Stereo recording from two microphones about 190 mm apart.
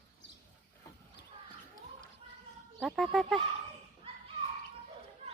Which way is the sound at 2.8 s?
Centre (ahead or behind).